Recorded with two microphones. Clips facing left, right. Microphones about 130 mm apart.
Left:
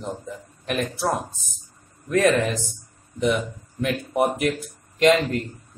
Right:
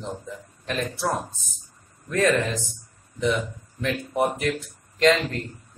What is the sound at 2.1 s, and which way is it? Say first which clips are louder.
Speech: left 2 dB; 15° left (ahead or behind).